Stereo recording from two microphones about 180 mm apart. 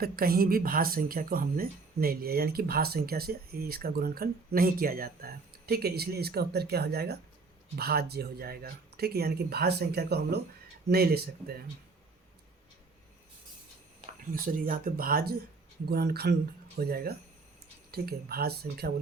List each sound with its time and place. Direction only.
0.0 s speech: 55° right (ahead or behind)
14.3 s speech: 50° right (ahead or behind)